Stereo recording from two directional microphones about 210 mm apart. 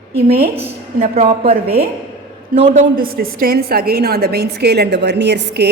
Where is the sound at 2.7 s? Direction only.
40° right (ahead or behind).